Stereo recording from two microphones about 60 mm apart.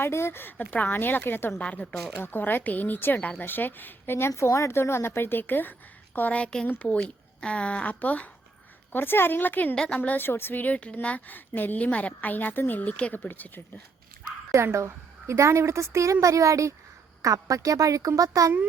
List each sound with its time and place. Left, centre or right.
0.0 s a woman's voice: left
0.6 s a woman's voice: left
1.5 s a woman's voice: centre
2.2 s a woman's voice: left
4.3 s a woman's voice: left
8.9 s a woman's voice: left
9.7 s a woman's voice: centre
10.0 s a woman's voice: left
14.5 s a woman's voice: right
17.2 s a woman's voice: right